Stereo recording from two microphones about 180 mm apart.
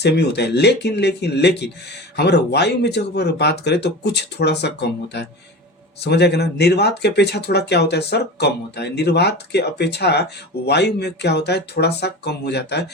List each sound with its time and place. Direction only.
0.0 s speech: 65° left (ahead or behind)